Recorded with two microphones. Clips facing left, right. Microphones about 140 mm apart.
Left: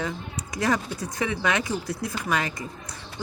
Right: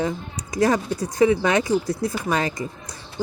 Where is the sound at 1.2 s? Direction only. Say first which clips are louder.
Right 8 dB; 35° right (ahead or behind).